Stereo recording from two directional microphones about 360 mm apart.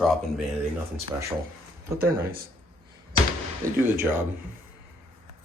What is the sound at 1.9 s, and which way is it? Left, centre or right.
Speech, right.